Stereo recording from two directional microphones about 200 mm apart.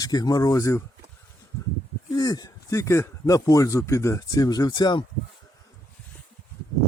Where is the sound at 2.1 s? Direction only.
20° left (ahead or behind).